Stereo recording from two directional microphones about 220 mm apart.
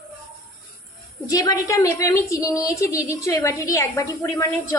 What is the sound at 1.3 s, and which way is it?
A woman's voice, 15° left (ahead or behind).